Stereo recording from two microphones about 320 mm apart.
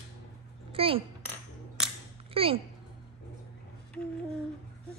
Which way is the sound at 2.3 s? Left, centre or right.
Centre.